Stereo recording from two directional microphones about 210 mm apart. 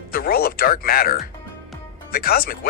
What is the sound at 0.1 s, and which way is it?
Speech, 45° left (ahead or behind).